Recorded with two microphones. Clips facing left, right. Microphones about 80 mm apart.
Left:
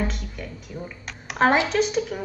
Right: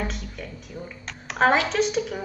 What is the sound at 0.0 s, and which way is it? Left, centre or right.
A woman's voice, centre.